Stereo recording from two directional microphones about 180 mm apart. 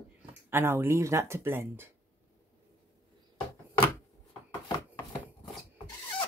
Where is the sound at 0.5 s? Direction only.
10° right (ahead or behind).